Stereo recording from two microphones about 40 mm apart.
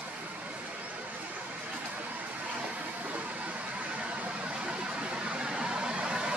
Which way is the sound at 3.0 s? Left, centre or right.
Right.